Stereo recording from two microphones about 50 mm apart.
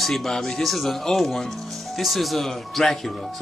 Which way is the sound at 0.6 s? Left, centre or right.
Centre.